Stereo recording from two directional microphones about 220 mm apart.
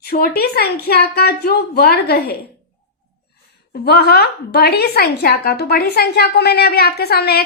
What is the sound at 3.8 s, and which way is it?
A woman's voice, 45° left (ahead or behind).